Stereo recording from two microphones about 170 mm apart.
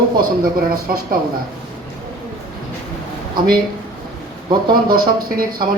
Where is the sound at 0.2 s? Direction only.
60° right (ahead or behind).